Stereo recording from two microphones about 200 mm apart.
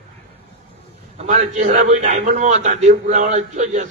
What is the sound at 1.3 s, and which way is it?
A man's voice, 40° right (ahead or behind).